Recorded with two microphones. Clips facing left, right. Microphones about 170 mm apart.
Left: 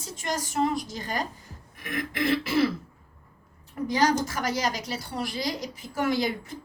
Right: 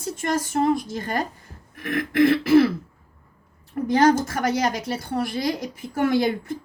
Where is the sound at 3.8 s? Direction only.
55° right (ahead or behind).